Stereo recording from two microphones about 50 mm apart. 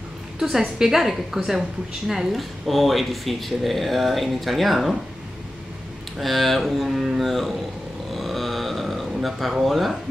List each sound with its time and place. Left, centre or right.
0.4 s a woman's voice: centre
6.1 s speech: centre
8.1 s a sound: centre